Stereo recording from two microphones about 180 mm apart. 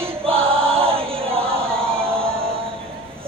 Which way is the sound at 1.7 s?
5° left (ahead or behind).